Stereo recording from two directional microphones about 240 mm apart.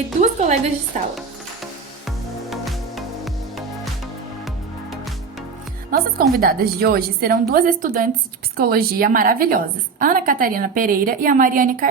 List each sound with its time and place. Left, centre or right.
0.2 s a woman's voice: right
2.0 s music: centre
5.9 s a woman's voice: right